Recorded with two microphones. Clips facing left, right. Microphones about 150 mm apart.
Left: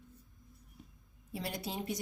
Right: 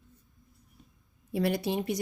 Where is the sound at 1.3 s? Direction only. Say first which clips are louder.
Right 11 dB; 70° right (ahead or behind).